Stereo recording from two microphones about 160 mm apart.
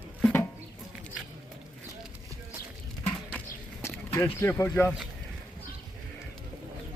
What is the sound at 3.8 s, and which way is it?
Speech, 15° left (ahead or behind).